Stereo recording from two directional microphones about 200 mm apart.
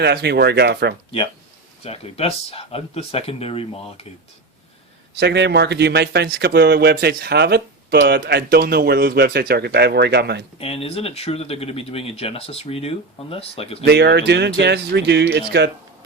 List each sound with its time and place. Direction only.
0.0 s a man's voice: 55° right (ahead or behind)
1.8 s speech: 30° left (ahead or behind)
5.2 s a man's voice: 55° right (ahead or behind)
10.6 s speech: 30° left (ahead or behind)
13.8 s a man's voice: 55° right (ahead or behind)